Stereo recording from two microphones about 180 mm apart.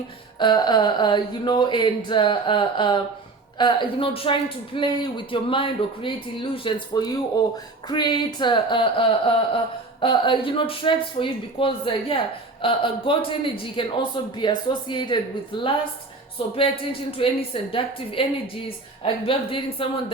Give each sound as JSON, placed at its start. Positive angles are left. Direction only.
{"t": 0.3, "sound": "a woman's voice", "side_deg": 25}